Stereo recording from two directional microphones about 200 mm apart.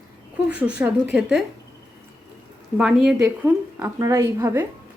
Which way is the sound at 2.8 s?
5° right (ahead or behind).